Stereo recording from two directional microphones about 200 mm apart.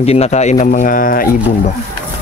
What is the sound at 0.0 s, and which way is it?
Speech, 30° left (ahead or behind).